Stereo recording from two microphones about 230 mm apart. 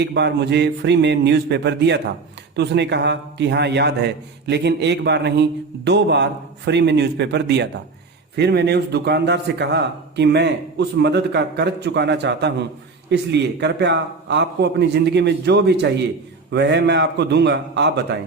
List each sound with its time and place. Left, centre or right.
0.0 s a man's voice: right